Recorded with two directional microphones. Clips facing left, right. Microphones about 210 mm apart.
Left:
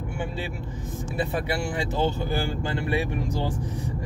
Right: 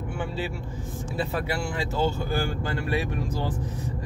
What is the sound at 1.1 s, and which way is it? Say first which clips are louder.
Speech: left 1 dB; 15° left (ahead or behind).